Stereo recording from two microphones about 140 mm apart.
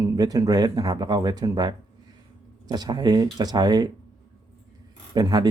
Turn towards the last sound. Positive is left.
turn(degrees=-30)  # may be behind; listen again after turning